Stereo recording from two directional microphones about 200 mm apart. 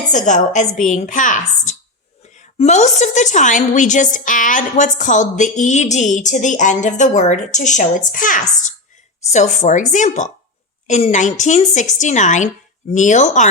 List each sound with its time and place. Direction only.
0.1 s a woman's voice: 35° left (ahead or behind)